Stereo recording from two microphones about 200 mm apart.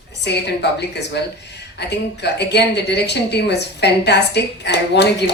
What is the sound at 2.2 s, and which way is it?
A woman's voice, 55° left (ahead or behind).